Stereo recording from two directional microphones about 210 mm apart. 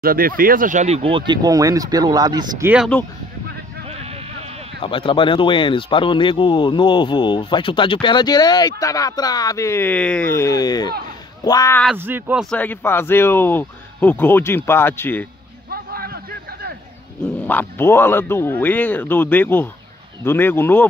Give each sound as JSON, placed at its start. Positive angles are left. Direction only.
{"t": 0.0, "sound": "speech", "side_deg": -45}
{"t": 2.9, "sound": "speech", "side_deg": 5}
{"t": 3.8, "sound": "a sound", "side_deg": -30}
{"t": 4.8, "sound": "speech", "side_deg": 25}
{"t": 10.9, "sound": "speech", "side_deg": -45}
{"t": 11.4, "sound": "speech", "side_deg": 15}
{"t": 11.8, "sound": "speech", "side_deg": -5}
{"t": 12.4, "sound": "speech", "side_deg": 10}
{"t": 15.7, "sound": "a sound", "side_deg": -45}
{"t": 17.4, "sound": "speech", "side_deg": 10}